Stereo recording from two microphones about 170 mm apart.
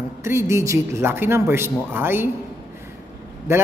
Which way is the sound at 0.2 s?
15° right (ahead or behind).